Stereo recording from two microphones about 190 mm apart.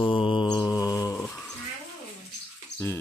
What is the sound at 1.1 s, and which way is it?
Bird, 5° left (ahead or behind).